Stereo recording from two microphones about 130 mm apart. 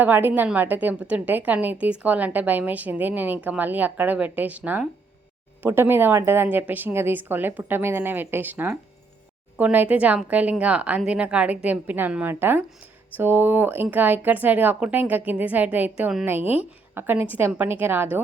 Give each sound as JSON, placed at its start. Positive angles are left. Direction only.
{"t": 0.0, "sound": "a woman's voice", "side_deg": -15}